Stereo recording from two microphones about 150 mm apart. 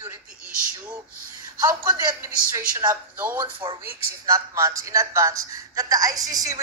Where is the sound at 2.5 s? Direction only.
25° right (ahead or behind).